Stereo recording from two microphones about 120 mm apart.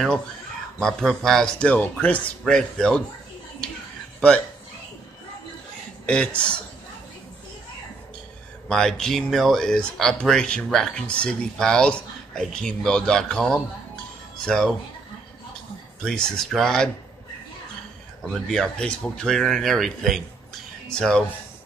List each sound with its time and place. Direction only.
0.7 s speech: 5° left (ahead or behind)
6.0 s speech: 10° left (ahead or behind)
8.6 s speech: 5° left (ahead or behind)
16.1 s speech: 5° left (ahead or behind)
18.3 s speech: 5° left (ahead or behind)